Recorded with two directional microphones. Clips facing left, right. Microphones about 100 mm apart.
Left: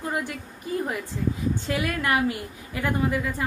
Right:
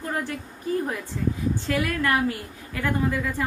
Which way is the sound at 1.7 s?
20° left (ahead or behind).